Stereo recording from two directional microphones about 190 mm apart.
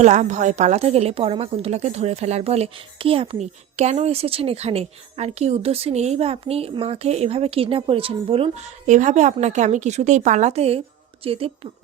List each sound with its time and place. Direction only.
0.0 s a woman's voice: 40° right (ahead or behind)
8.9 s a woman's voice: 40° right (ahead or behind)